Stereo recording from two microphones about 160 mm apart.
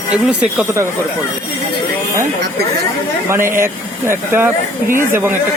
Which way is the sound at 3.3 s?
15° right (ahead or behind).